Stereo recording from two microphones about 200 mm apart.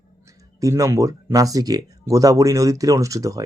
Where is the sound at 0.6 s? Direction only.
15° right (ahead or behind).